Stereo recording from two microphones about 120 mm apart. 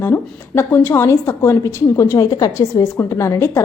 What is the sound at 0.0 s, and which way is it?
A woman's voice, 20° left (ahead or behind).